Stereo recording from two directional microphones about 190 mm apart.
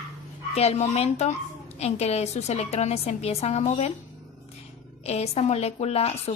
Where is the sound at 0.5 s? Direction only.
35° left (ahead or behind).